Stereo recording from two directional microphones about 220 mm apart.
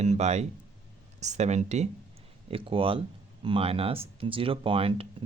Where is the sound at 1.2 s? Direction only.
30° right (ahead or behind).